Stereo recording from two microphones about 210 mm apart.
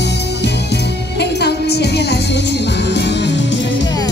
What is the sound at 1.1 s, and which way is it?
Music, 50° left (ahead or behind).